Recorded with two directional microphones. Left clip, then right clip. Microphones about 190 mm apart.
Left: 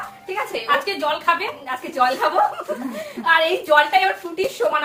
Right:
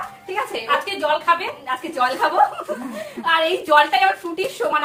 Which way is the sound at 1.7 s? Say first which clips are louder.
Left 1 dB; 10° right (ahead or behind).